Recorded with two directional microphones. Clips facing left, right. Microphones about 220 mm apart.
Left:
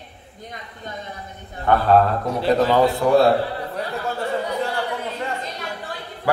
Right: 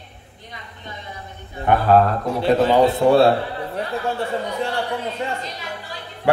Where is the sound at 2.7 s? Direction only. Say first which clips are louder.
Right 3 dB; 25° right (ahead or behind).